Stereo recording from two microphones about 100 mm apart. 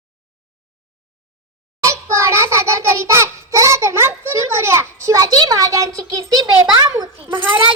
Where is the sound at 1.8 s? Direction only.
30° right (ahead or behind).